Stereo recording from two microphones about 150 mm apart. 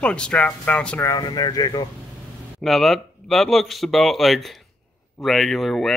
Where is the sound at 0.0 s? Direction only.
5° left (ahead or behind).